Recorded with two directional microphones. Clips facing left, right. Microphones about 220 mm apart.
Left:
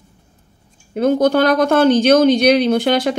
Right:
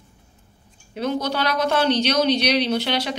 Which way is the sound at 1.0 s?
50° left (ahead or behind).